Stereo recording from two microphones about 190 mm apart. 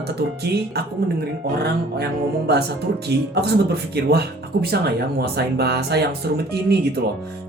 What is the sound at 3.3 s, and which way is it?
Speech, 60° right (ahead or behind).